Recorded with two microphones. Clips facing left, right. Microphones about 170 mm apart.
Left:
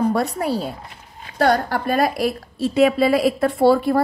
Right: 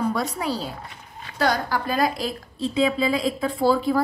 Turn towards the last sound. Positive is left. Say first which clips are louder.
# left 5 dB
turn(degrees=65)  # may be behind; listen again after turning